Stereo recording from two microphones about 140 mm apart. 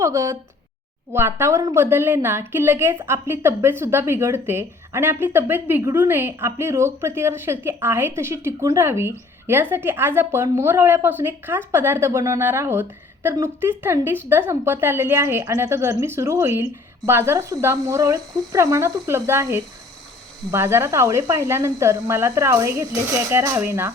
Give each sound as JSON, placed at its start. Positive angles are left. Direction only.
{"t": 0.0, "sound": "a woman's voice", "side_deg": -20}